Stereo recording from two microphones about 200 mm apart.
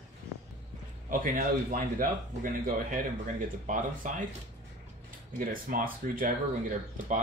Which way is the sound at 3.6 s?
40° right (ahead or behind).